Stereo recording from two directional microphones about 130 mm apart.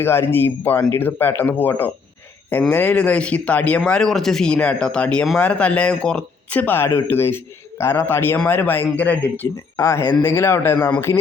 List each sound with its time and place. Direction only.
0.0 s a man's voice: 20° left (ahead or behind)